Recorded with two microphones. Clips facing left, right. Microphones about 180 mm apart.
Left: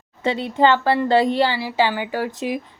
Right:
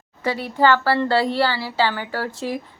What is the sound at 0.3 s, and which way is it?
A woman's voice, 20° left (ahead or behind).